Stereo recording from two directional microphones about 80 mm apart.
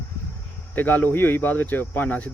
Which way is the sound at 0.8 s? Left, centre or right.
Left.